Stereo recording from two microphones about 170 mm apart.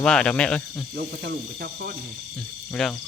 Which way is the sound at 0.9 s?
65° right (ahead or behind).